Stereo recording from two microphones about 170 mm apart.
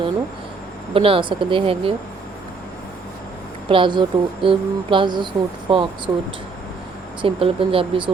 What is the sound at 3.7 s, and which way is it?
Speech, 30° right (ahead or behind).